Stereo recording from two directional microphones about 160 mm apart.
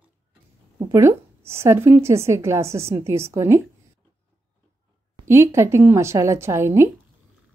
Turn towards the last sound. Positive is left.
turn(degrees=-15)  # may be behind; listen again after turning